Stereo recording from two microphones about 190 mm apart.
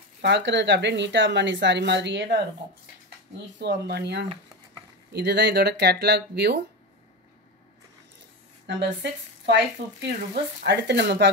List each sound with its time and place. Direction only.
0.2 s speech: 65° right (ahead or behind)
3.5 s speech: 65° right (ahead or behind)
8.6 s a woman's voice: 70° right (ahead or behind)
10.6 s speech: 60° right (ahead or behind)